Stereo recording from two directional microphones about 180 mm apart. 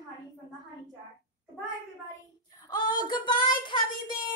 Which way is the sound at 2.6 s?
25° left (ahead or behind).